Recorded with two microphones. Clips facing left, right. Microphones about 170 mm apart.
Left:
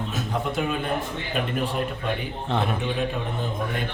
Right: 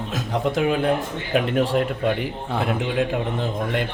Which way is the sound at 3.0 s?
90° right.